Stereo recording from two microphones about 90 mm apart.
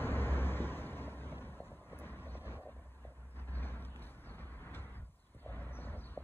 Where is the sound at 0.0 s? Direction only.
25° left (ahead or behind).